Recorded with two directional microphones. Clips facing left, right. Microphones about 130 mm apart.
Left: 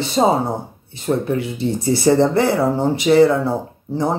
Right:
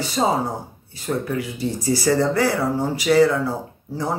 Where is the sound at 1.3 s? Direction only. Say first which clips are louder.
Left 4 dB; 25° left (ahead or behind).